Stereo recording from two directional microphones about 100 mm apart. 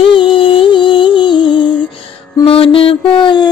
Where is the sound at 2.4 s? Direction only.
65° left (ahead or behind).